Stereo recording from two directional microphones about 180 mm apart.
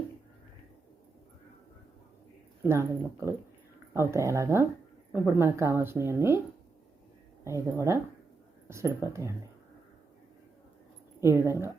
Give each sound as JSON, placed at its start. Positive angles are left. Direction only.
{"t": 2.6, "sound": "a woman's voice", "side_deg": -15}
{"t": 7.4, "sound": "a woman's voice", "side_deg": -15}
{"t": 11.2, "sound": "a woman's voice", "side_deg": -15}